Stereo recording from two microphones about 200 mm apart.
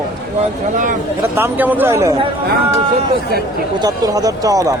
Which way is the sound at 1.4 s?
10° right (ahead or behind).